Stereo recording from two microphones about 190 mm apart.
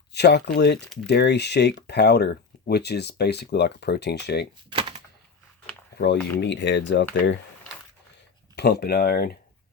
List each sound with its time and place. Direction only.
0.1 s speech: 60° left (ahead or behind)
4.7 s typewriter: 25° right (ahead or behind)
6.4 s speech: 70° left (ahead or behind)
8.5 s speech: 60° left (ahead or behind)